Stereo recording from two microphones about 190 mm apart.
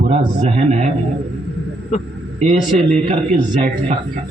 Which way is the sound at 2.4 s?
35° right (ahead or behind).